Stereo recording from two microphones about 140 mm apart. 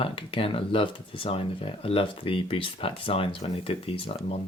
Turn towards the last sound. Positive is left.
turn(degrees=45)  # may be behind; listen again after turning